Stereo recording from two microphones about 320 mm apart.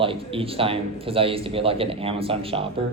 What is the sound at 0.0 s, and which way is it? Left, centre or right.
A man's voice, centre.